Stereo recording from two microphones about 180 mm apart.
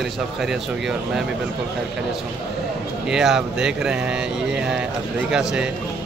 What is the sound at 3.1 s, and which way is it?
A man's voice, 5° right (ahead or behind).